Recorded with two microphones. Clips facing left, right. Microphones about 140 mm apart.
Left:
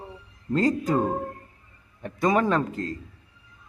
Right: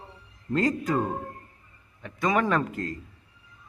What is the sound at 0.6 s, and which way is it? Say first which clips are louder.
Speech: left 2 dB; 30° left (ahead or behind).